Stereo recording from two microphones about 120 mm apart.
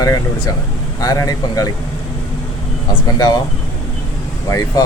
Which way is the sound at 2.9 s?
35° left (ahead or behind).